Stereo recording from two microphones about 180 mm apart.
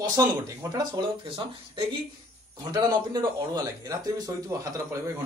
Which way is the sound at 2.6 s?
20° right (ahead or behind).